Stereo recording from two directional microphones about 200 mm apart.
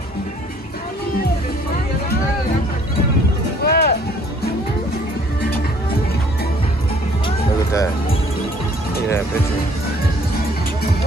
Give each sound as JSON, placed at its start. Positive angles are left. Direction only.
{"t": 3.6, "sound": "music", "side_deg": 50}